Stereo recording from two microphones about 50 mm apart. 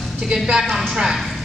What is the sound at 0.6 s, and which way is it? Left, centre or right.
Speech, centre.